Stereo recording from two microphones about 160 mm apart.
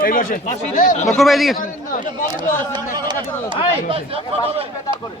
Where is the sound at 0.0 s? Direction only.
55° left (ahead or behind).